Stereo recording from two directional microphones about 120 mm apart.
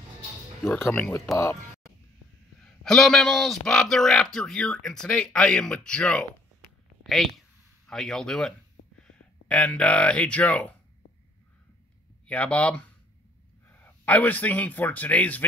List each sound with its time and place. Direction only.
0.7 s speech: 20° left (ahead or behind)
1.3 s speech: 25° left (ahead or behind)
2.6 s a man's voice: 5° left (ahead or behind)
12.3 s speech: 10° left (ahead or behind)